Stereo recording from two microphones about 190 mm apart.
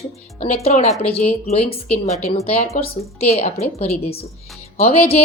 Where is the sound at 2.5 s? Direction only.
35° left (ahead or behind).